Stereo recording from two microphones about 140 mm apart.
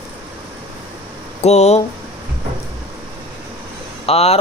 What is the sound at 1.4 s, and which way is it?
Speech, 50° left (ahead or behind).